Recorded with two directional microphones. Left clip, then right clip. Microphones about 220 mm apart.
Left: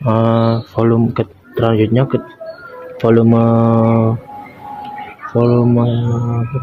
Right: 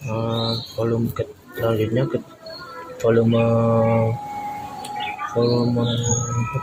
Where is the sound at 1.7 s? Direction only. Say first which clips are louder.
Left 6 dB; 40° left (ahead or behind).